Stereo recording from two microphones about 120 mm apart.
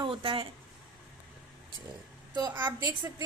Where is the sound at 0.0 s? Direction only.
45° right (ahead or behind).